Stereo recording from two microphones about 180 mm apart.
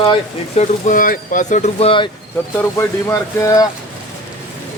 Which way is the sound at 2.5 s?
15° left (ahead or behind).